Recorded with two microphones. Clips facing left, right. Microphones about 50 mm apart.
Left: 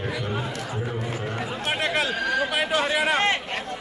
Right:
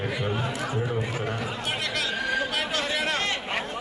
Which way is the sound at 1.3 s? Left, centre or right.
Left.